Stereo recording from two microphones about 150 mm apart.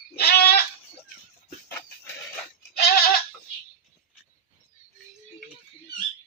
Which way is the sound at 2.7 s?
90° left.